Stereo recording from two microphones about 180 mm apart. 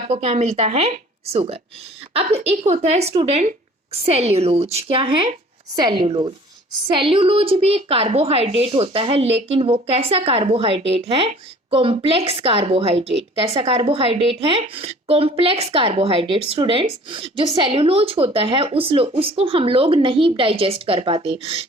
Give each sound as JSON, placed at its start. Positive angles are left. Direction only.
{"t": 0.1, "sound": "a woman's voice", "side_deg": -35}